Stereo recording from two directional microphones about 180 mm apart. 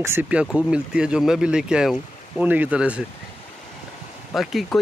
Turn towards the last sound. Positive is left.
turn(degrees=0)  # may be behind; listen again after turning